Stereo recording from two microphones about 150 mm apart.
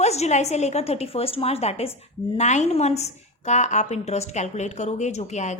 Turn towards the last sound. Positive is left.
turn(degrees=50)  # may be behind; listen again after turning